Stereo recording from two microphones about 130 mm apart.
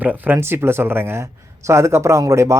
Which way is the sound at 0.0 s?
15° right (ahead or behind).